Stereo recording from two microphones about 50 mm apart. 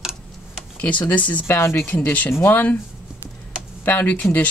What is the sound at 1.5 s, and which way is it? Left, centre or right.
Speech, left.